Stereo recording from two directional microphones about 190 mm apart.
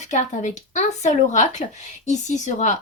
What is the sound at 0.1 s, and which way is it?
Speech, 40° left (ahead or behind).